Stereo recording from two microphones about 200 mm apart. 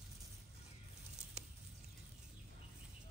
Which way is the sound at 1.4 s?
35° right (ahead or behind).